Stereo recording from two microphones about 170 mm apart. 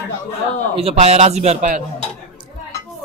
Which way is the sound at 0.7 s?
35° right (ahead or behind).